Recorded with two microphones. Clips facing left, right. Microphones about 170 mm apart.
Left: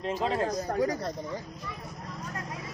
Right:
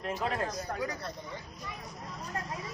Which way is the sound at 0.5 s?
40° left (ahead or behind).